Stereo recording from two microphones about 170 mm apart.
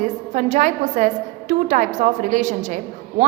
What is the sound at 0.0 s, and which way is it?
A woman's voice, 45° right (ahead or behind).